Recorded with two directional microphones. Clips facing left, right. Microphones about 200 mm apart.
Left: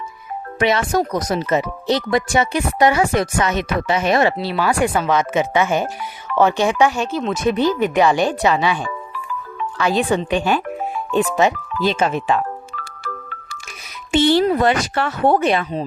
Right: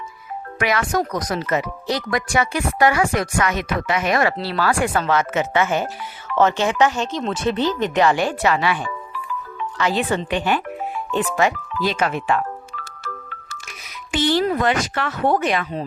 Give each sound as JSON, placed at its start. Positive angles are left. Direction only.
{"t": 0.6, "sound": "speech", "side_deg": 25}
{"t": 4.4, "sound": "speech", "side_deg": 15}
{"t": 14.1, "sound": "speech", "side_deg": 25}